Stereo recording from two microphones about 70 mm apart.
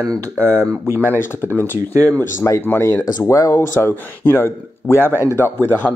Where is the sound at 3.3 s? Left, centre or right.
Left.